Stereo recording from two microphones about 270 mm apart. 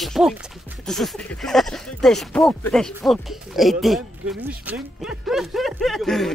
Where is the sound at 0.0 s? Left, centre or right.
Centre.